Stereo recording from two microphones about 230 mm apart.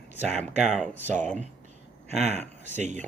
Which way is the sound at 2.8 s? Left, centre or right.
Right.